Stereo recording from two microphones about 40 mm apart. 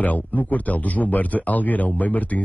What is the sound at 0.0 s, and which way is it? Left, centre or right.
Speech, left.